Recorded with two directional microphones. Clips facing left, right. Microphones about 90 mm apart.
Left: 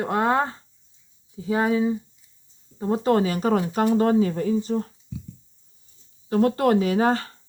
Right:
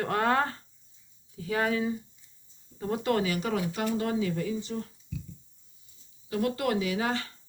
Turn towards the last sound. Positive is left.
turn(degrees=40)  # may be behind; listen again after turning